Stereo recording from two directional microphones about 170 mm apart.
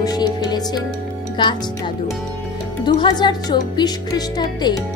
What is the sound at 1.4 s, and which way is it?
Speech, 30° left (ahead or behind).